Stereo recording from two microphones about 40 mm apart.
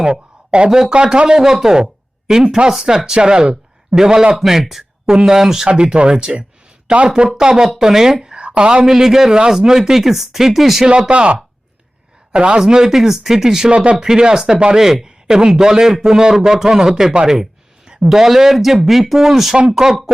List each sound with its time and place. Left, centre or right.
0.0 s speech: right
4.4 s speech: centre
5.6 s speech: right; by 10.8 s centre
11.1 s speech: right; by 13.7 s centre
13.7 s speech: right
14.0 s speech: centre
14.8 s a man's voice: centre